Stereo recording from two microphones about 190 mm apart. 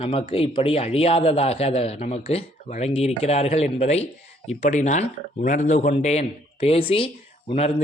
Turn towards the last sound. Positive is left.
turn(degrees=35)  # may be behind; listen again after turning